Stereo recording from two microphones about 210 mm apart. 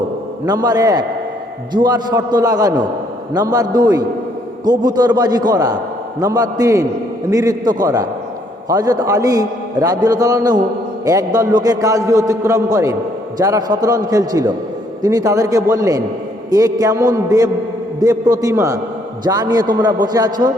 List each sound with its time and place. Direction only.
0.4 s a man's voice: 15° right (ahead or behind)